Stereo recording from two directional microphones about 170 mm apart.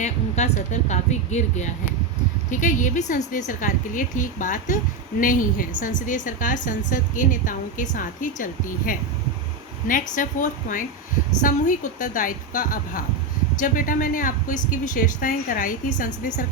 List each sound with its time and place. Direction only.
0.0 s a woman's voice: 40° left (ahead or behind)